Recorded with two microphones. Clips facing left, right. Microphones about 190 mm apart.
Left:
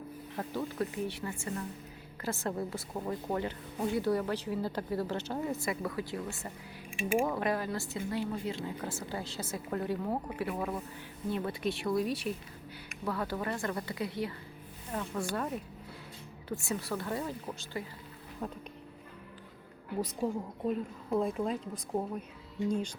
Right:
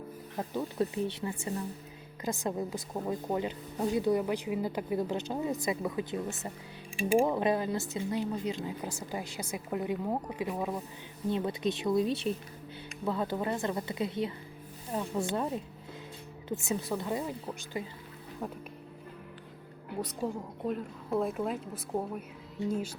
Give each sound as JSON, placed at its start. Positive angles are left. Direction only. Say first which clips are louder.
{"t": 0.3, "sound": "speech", "louder": "right 3 dB", "side_deg": -20}
{"t": 6.9, "sound": "speech", "louder": "right 4 dB", "side_deg": -35}
{"t": 7.3, "sound": "speech", "louder": "right 3 dB", "side_deg": -20}
{"t": 20.2, "sound": "a woman's voice", "louder": "left 1 dB", "side_deg": 0}